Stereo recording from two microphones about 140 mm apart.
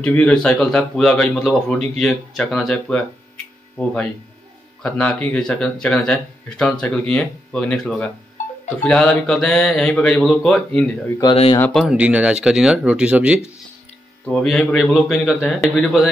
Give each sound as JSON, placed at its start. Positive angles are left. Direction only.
{"t": 0.0, "sound": "speech", "side_deg": 10}
{"t": 14.2, "sound": "speech", "side_deg": 5}